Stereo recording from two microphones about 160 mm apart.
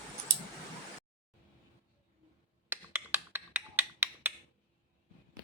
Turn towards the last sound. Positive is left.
turn(degrees=-10)  # may be behind; listen again after turning